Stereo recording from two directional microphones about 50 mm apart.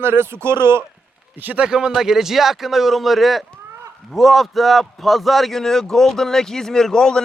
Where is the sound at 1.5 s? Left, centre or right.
Centre.